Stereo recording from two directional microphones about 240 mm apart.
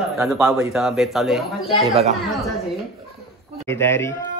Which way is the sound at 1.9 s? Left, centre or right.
Right.